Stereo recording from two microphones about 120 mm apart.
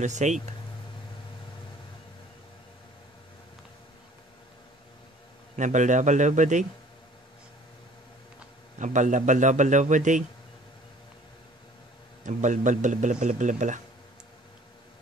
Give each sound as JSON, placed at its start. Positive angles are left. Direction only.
{"t": 0.0, "sound": "speech", "side_deg": -80}
{"t": 5.6, "sound": "a man's voice", "side_deg": -90}
{"t": 8.7, "sound": "a man's voice", "side_deg": -90}
{"t": 12.2, "sound": "a man's voice", "side_deg": -90}